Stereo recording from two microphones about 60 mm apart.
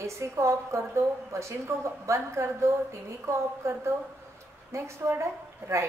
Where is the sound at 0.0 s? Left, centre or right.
Right.